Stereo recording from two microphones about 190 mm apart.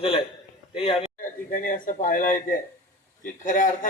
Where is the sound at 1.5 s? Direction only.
45° left (ahead or behind).